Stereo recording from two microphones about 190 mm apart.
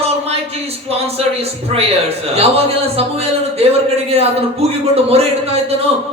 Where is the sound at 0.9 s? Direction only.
30° right (ahead or behind).